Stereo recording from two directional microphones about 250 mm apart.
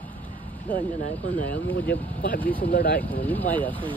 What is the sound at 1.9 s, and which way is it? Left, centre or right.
Speech, left.